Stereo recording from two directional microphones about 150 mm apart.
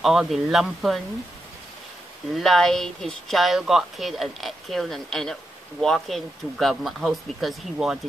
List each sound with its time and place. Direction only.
0.0 s speech: centre (ahead or behind)
2.3 s speech: centre (ahead or behind)